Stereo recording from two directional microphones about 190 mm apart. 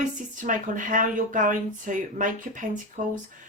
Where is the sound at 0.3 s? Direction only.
45° right (ahead or behind).